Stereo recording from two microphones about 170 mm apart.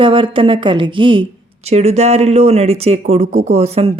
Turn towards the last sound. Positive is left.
turn(degrees=-35)  # may be behind; listen again after turning